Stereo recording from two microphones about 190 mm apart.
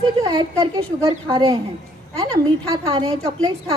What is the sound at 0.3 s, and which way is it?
A woman's voice, 20° right (ahead or behind).